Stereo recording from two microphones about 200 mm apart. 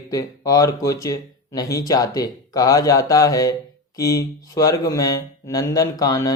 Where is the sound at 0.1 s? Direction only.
20° left (ahead or behind).